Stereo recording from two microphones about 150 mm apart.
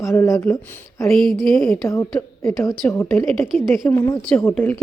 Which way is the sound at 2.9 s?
15° left (ahead or behind).